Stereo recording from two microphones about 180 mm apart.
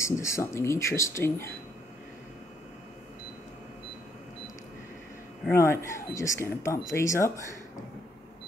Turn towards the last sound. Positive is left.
turn(degrees=15)  # may be behind; listen again after turning